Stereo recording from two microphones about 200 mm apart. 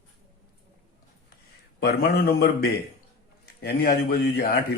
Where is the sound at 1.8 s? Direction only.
50° left (ahead or behind).